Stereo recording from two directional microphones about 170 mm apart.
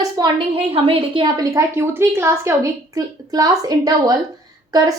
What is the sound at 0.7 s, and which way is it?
Speech, 35° right (ahead or behind).